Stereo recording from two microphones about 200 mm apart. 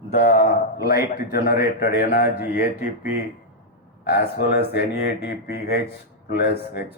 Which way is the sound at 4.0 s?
55° left (ahead or behind).